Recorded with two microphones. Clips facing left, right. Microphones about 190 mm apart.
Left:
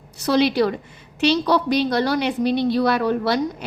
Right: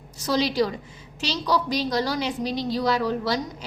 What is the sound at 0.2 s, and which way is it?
A woman's voice, 65° left (ahead or behind).